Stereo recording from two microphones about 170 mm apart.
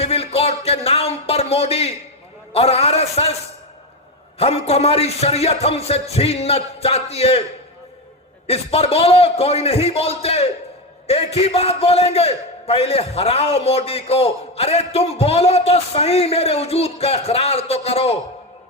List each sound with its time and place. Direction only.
0.0 s a sound: 35° left (ahead or behind)
2.5 s a man's voice: 35° left (ahead or behind)
4.4 s a man's voice: 35° left (ahead or behind)
8.4 s a man's voice: 35° left (ahead or behind)